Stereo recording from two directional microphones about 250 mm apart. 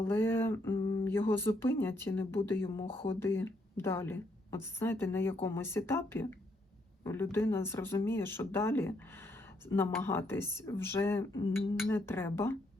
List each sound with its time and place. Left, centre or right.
0.0 s a woman's voice: centre
0.8 s a sound: centre
1.0 s a woman's voice: centre